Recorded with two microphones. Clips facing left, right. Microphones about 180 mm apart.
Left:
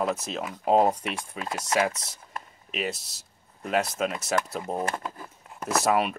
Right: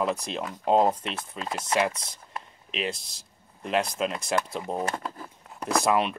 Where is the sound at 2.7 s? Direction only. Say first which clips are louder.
Even; 5° left (ahead or behind).